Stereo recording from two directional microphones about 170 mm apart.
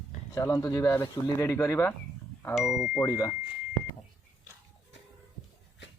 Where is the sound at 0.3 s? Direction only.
15° left (ahead or behind).